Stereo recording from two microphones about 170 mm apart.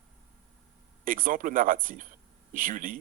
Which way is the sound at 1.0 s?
50° right (ahead or behind).